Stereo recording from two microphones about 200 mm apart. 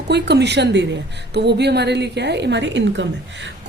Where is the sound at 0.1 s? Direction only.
55° right (ahead or behind).